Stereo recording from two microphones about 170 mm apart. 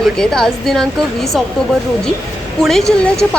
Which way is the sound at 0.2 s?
5° left (ahead or behind).